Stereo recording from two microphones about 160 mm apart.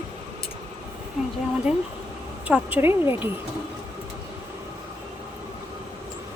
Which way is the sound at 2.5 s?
10° right (ahead or behind).